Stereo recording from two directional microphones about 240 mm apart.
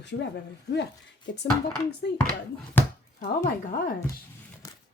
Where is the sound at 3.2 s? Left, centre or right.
Left.